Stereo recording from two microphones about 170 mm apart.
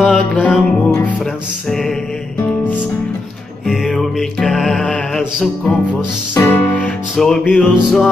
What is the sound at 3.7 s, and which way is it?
Music, centre (ahead or behind).